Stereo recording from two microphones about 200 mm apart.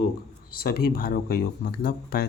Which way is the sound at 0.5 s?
45° left (ahead or behind).